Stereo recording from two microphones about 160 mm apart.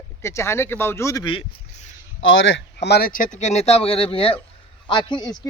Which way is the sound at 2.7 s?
90° left.